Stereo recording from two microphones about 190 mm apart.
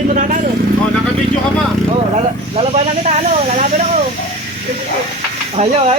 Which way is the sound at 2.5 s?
35° right (ahead or behind).